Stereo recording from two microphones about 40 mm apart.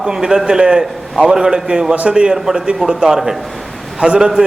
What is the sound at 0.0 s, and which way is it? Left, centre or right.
A man's voice, centre.